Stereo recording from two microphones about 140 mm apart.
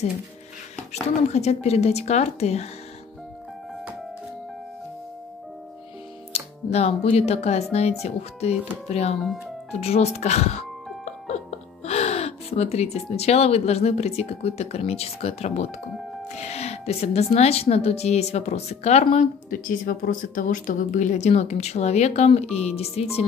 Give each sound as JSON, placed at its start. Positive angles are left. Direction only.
{"t": 1.3, "sound": "speech", "side_deg": 50}
{"t": 6.3, "sound": "speech", "side_deg": 50}
{"t": 19.5, "sound": "speech", "side_deg": 80}